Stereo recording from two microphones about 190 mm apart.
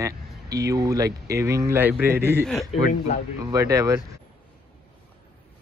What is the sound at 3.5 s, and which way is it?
Speech, 15° right (ahead or behind).